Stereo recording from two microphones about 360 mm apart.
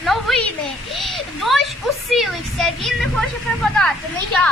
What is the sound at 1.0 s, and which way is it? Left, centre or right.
A woman's voice, centre.